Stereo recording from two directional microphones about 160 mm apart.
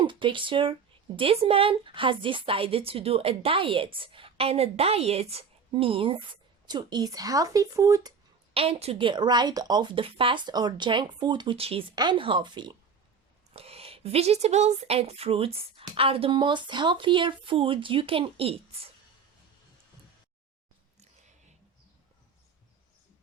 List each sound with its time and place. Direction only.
0.0 s speech: 30° right (ahead or behind)
8.5 s speech: 40° right (ahead or behind)
13.5 s speech: 40° right (ahead or behind)